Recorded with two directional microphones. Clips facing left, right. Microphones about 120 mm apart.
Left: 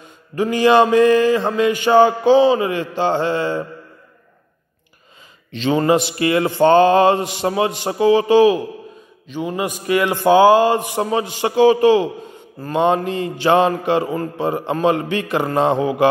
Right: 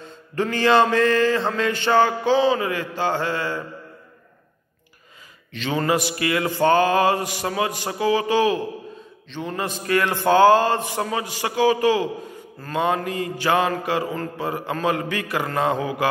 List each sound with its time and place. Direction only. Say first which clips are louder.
0.0 s mantra: left 4 dB; 15° left (ahead or behind)
5.5 s mantra: left 6 dB; 25° left (ahead or behind)
11.1 s mantra: left 6 dB; 25° left (ahead or behind)